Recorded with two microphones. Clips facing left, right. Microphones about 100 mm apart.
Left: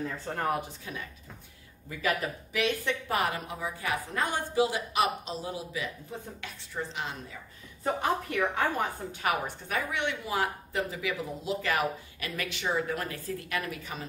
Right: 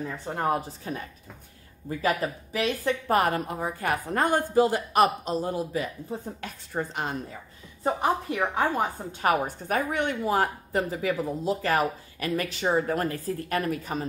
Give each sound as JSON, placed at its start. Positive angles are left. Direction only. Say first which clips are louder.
{"t": 0.0, "sound": "speech", "louder": "right 3 dB", "side_deg": -15}
{"t": 0.6, "sound": "a woman's voice", "louder": "right 4 dB", "side_deg": -40}
{"t": 6.1, "sound": "a woman's voice", "louder": "right 6 dB", "side_deg": -30}
{"t": 6.4, "sound": "a woman's voice", "louder": "right 5 dB", "side_deg": -45}
{"t": 7.8, "sound": "a woman's voice", "louder": "right 4 dB", "side_deg": -25}
{"t": 9.3, "sound": "a woman's voice", "louder": "right 6 dB", "side_deg": -45}